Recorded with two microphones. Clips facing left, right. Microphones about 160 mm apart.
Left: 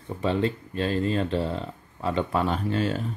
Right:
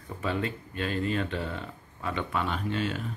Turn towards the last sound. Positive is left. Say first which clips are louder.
# left 5 dB
turn(degrees=35)  # may be behind; listen again after turning